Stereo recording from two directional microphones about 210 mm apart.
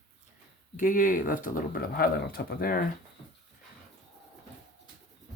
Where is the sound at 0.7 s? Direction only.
40° left (ahead or behind).